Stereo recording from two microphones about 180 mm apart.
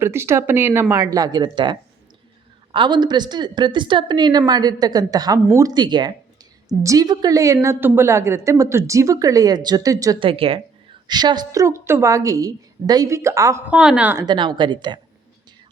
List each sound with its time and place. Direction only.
0.0 s a woman's voice: 15° right (ahead or behind)
14.3 s a woman's voice: 25° right (ahead or behind)